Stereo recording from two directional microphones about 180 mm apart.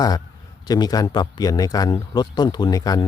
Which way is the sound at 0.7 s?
20° left (ahead or behind).